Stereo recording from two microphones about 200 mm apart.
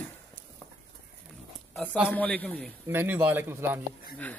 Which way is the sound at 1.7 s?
5° right (ahead or behind).